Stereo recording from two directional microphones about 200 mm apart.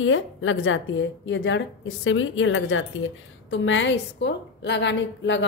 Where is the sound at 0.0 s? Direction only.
75° left (ahead or behind).